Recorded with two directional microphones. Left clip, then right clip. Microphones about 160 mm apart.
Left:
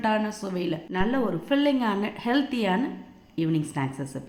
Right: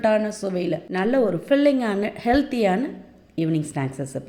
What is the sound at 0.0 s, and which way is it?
A woman's voice, 20° right (ahead or behind).